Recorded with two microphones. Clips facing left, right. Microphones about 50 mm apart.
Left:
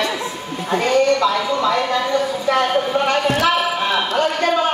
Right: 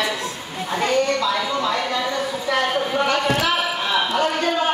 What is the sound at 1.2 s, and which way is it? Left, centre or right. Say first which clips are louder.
Speech: left 4 dB; left.